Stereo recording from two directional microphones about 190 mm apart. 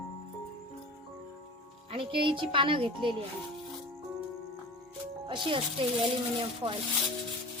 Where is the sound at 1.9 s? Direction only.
25° right (ahead or behind).